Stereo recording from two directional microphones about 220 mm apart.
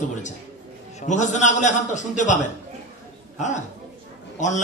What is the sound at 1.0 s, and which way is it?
A man's voice, 35° left (ahead or behind).